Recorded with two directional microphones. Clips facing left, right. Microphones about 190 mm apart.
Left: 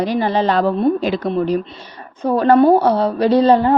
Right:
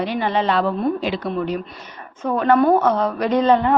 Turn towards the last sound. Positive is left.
turn(degrees=35)  # may be behind; listen again after turning